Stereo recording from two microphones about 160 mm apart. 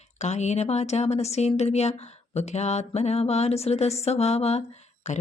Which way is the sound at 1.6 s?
45° left (ahead or behind).